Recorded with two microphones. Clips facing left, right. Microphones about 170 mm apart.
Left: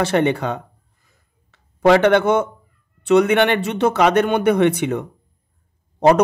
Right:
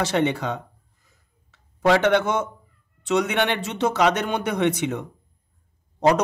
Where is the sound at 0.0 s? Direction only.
60° left (ahead or behind).